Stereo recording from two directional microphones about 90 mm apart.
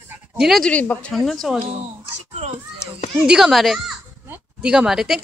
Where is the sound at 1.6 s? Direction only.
90° right.